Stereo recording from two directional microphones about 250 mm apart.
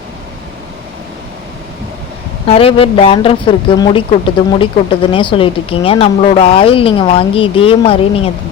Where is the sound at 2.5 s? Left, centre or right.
Left.